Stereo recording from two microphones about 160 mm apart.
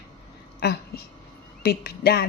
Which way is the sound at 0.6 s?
90° left.